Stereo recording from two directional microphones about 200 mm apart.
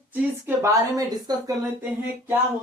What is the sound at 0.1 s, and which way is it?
A woman's voice, 15° right (ahead or behind).